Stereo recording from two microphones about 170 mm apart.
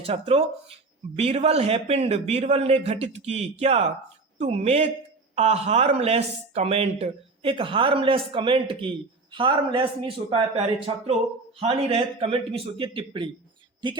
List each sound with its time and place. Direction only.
0.0 s speech: 35° right (ahead or behind)